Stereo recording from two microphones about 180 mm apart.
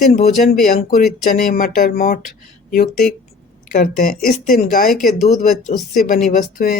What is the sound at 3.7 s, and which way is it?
Speech, 50° left (ahead or behind).